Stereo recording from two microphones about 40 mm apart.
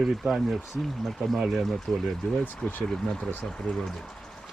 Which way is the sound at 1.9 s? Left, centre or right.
Centre.